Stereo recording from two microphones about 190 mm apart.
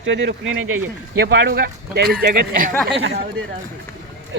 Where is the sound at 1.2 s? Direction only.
60° right (ahead or behind).